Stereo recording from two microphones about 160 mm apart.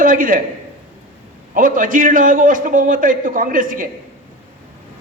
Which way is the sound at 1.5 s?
60° right (ahead or behind).